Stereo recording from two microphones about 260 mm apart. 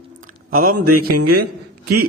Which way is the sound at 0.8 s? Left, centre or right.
Right.